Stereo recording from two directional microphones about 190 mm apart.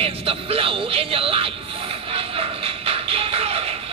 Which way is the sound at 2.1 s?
30° right (ahead or behind).